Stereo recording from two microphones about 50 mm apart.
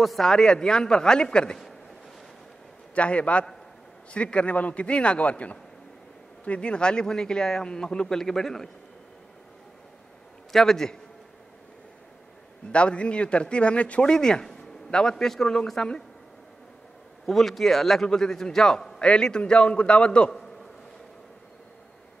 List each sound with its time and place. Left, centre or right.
0.0 s a man's voice: centre
2.9 s a man's voice: left; by 8.6 s centre
10.5 s a man's voice: centre
12.7 s a man's voice: left
14.1 s a man's voice: centre
17.3 s a man's voice: centre; by 20.2 s left